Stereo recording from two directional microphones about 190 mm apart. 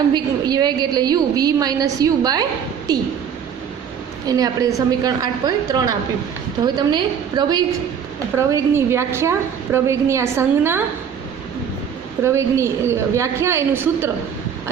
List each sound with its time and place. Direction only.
0.1 s a woman's voice: 20° right (ahead or behind)
4.3 s a woman's voice: 20° right (ahead or behind)
12.2 s a woman's voice: 15° right (ahead or behind)